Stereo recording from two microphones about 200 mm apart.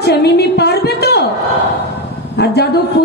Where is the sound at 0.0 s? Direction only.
55° left (ahead or behind).